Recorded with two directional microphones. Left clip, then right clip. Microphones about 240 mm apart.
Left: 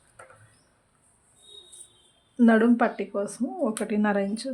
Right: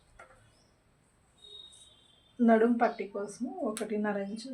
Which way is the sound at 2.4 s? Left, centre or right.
Left.